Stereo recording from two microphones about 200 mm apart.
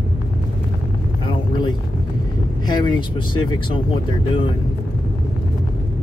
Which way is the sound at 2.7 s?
20° left (ahead or behind).